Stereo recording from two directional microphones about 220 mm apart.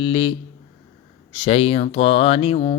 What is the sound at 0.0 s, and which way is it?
Speech, 25° left (ahead or behind).